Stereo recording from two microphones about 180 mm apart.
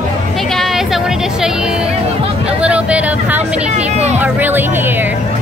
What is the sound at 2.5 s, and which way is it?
Speech, 5° right (ahead or behind).